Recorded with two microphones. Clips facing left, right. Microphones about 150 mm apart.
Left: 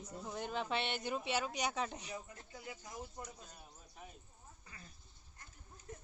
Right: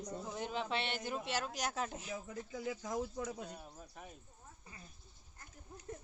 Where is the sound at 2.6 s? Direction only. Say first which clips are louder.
Right 10 dB; 90° right.